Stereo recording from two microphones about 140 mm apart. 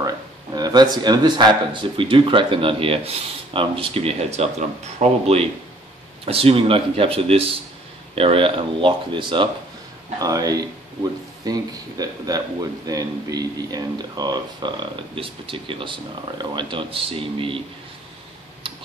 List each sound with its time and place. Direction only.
0.6 s speech: 30° right (ahead or behind)
10.2 s speech: 25° right (ahead or behind)
15.1 s speech: 40° right (ahead or behind)